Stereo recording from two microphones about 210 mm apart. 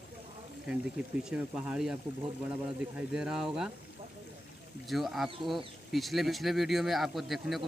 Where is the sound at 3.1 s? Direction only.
5° right (ahead or behind).